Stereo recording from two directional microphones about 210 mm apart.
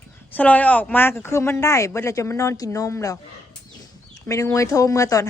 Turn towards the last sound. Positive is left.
turn(degrees=15)  # may be behind; listen again after turning